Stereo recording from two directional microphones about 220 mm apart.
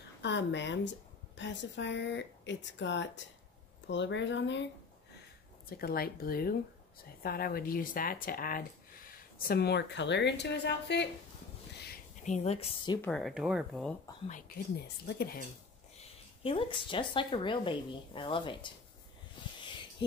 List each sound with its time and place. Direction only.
0.2 s a woman's voice: 55° left (ahead or behind)
5.7 s speech: 45° left (ahead or behind)
12.3 s speech: 30° left (ahead or behind)
13.0 s speech: centre (ahead or behind)
14.2 s speech: 35° left (ahead or behind)
16.4 s speech: 25° left (ahead or behind)
19.6 s a sound: 20° left (ahead or behind)